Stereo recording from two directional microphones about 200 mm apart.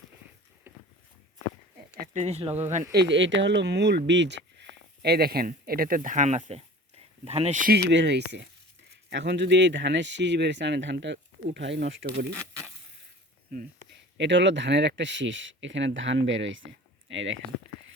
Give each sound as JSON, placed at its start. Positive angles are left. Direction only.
{"t": 0.7, "sound": "a sound", "side_deg": -10}
{"t": 2.0, "sound": "speech", "side_deg": -35}
{"t": 2.9, "sound": "speech", "side_deg": -60}
{"t": 7.9, "sound": "speech", "side_deg": -60}
{"t": 14.2, "sound": "speech", "side_deg": -65}